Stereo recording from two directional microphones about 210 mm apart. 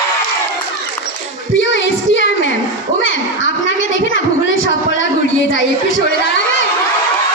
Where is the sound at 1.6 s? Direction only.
60° left (ahead or behind).